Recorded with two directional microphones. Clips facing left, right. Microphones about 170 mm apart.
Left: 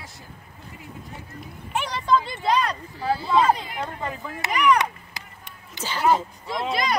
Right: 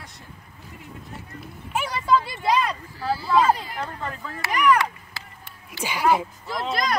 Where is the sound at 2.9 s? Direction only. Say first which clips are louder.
Left 3 dB; 20° left (ahead or behind).